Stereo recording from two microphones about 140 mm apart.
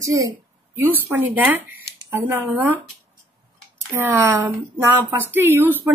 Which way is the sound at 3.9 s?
20° right (ahead or behind).